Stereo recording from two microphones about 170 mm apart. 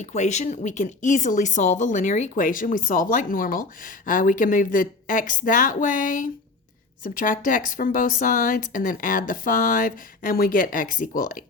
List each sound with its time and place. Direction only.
0.0 s speech: 45° left (ahead or behind)